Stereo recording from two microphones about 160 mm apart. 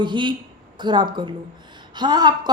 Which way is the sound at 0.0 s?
30° right (ahead or behind).